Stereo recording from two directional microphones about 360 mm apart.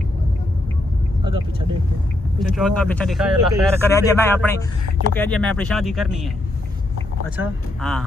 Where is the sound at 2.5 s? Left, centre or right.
Centre.